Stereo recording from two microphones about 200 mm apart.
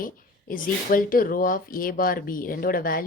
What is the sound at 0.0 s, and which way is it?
Speech, 45° left (ahead or behind).